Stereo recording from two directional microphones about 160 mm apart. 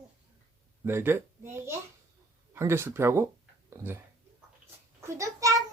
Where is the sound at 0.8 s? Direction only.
15° right (ahead or behind).